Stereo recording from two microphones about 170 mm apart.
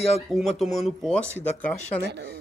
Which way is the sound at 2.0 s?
75° right (ahead or behind).